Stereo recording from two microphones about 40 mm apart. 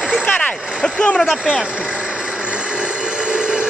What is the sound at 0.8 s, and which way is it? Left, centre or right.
Speech, left.